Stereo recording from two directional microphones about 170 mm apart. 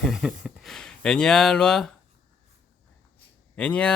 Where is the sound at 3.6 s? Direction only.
5° left (ahead or behind).